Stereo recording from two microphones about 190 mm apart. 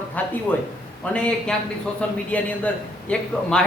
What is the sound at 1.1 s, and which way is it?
A man's voice, 5° left (ahead or behind).